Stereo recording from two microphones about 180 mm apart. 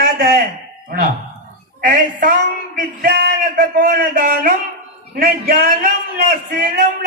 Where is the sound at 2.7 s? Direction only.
60° right (ahead or behind).